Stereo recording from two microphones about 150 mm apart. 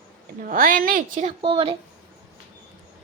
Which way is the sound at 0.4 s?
65° right (ahead or behind).